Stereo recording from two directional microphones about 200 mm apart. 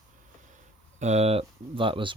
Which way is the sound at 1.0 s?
35° right (ahead or behind).